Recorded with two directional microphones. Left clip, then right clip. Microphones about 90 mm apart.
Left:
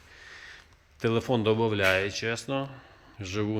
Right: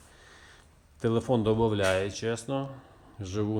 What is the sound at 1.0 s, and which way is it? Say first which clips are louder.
Speech: left 1 dB; 15° right (ahead or behind).